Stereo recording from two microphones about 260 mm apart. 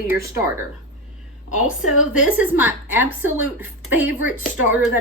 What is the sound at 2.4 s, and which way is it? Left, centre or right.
A woman's voice, centre.